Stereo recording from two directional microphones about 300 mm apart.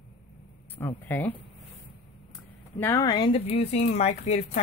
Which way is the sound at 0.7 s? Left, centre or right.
Centre.